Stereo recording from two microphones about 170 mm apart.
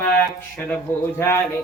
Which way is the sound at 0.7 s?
15° left (ahead or behind).